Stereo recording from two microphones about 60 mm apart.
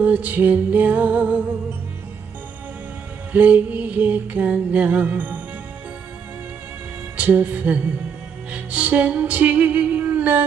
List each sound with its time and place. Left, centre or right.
0.0 s music: right
3.3 s mantra: right
7.2 s mantra: right
8.5 s music: right